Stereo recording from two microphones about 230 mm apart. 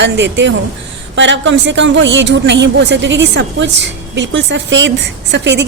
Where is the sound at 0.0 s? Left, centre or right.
Right.